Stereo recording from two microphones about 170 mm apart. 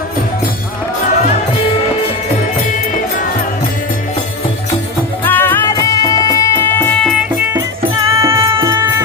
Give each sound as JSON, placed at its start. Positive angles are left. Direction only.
{"t": 5.2, "sound": "music", "side_deg": 10}
{"t": 8.1, "sound": "music", "side_deg": -20}